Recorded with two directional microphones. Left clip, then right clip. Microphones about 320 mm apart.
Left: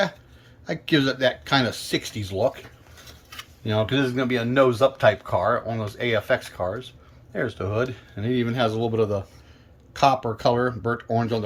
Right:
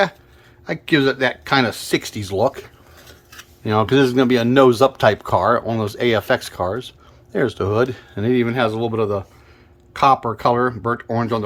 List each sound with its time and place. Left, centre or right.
0.6 s speech: centre